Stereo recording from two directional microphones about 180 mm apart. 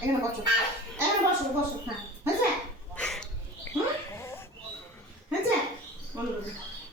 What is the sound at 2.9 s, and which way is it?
Dog, 5° left (ahead or behind).